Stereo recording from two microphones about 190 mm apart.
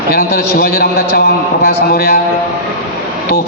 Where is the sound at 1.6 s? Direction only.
55° left (ahead or behind).